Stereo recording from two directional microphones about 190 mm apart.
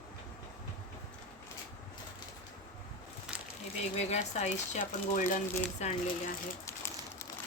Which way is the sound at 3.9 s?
35° left (ahead or behind).